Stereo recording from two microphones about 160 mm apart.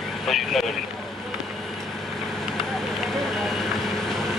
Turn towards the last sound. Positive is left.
turn(degrees=0)  # may be behind; listen again after turning